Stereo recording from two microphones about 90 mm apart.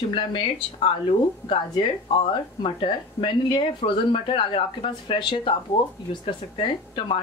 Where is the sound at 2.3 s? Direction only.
75° left (ahead or behind).